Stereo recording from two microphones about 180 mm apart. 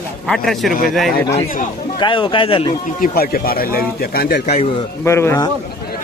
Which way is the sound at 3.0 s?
55° left (ahead or behind).